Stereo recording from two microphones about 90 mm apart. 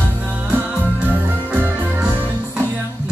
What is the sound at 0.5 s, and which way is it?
Music, 20° right (ahead or behind).